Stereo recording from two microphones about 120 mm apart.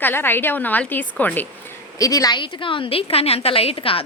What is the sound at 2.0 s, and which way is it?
A woman's voice, 30° left (ahead or behind).